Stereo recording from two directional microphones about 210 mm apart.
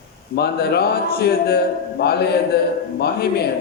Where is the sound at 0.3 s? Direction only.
50° left (ahead or behind).